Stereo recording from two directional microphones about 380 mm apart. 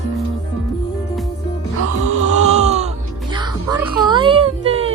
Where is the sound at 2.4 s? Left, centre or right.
Centre.